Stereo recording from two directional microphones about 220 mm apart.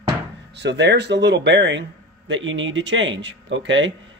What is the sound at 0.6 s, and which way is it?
Speech, 50° right (ahead or behind).